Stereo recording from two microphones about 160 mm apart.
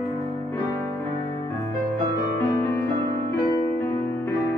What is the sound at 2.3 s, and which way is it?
Music, 15° left (ahead or behind).